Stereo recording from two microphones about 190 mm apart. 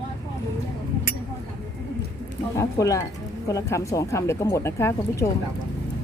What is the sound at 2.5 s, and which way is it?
Speech, 15° left (ahead or behind).